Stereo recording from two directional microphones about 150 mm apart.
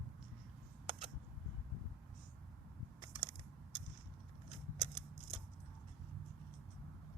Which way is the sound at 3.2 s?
30° right (ahead or behind).